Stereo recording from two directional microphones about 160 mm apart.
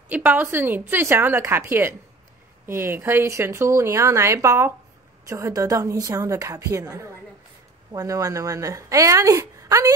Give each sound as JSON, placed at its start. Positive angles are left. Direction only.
{"t": 0.1, "sound": "speech", "side_deg": -10}